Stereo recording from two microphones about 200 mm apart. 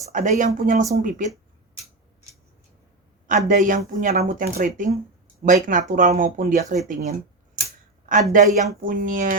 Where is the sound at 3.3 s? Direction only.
40° right (ahead or behind).